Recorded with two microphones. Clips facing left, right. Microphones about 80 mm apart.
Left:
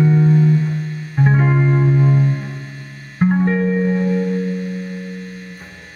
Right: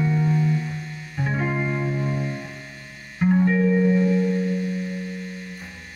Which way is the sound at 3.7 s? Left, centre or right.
Left.